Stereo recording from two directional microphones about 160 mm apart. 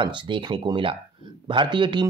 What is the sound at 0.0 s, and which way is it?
Speech, 30° right (ahead or behind).